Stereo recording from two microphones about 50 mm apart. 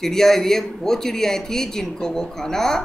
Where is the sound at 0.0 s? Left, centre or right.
Centre.